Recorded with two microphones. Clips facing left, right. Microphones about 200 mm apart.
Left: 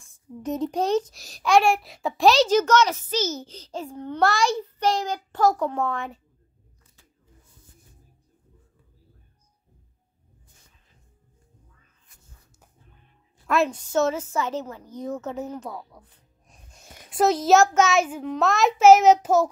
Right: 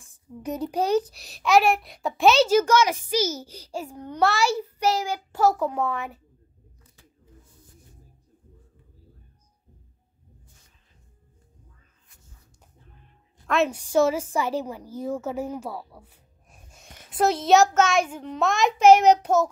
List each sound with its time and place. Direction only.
0.4 s a child's voice: 10° right (ahead or behind)
13.7 s a woman's voice: 10° right (ahead or behind); by 19.4 s 5° left (ahead or behind)